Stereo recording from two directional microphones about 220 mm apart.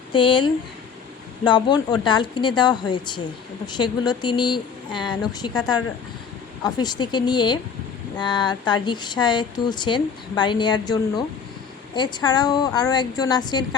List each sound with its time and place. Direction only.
0.1 s speech: 20° left (ahead or behind)